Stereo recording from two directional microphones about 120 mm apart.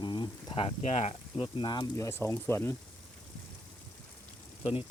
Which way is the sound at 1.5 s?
40° left (ahead or behind).